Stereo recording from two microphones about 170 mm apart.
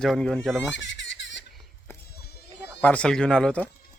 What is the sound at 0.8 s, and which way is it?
Baby laughter, 90° left.